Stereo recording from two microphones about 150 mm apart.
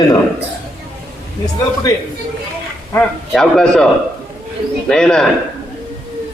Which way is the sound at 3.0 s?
5° left (ahead or behind).